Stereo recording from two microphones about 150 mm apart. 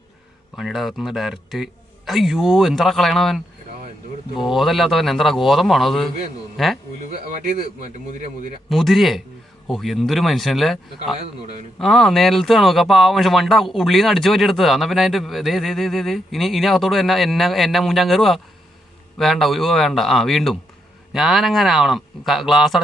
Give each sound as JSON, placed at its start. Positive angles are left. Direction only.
{"t": 0.5, "sound": "speech", "side_deg": 0}
{"t": 4.5, "sound": "speech", "side_deg": 0}
{"t": 8.0, "sound": "speech", "side_deg": -60}
{"t": 8.7, "sound": "speech", "side_deg": 0}